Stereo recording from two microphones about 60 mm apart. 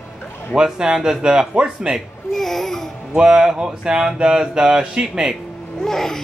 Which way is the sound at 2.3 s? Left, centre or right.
Centre.